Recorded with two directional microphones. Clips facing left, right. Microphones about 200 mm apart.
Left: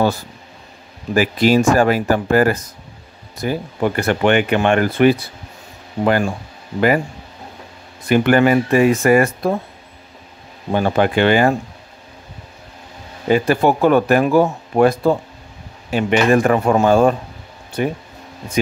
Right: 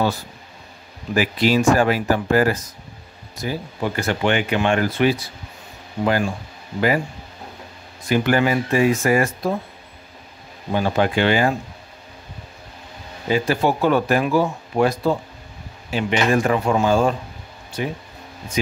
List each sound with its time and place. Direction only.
1.1 s speech: 45° left (ahead or behind)
8.1 s speech: 60° left (ahead or behind)
10.7 s speech: 55° left (ahead or behind)
13.3 s speech: 55° left (ahead or behind)